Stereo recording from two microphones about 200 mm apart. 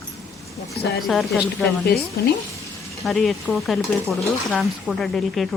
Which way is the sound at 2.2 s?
50° left (ahead or behind).